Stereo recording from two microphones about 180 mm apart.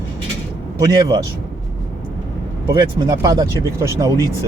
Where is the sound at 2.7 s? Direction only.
20° right (ahead or behind).